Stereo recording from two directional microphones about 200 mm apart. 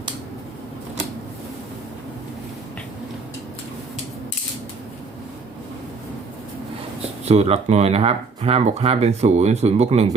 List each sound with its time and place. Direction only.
7.3 s speech: 30° right (ahead or behind)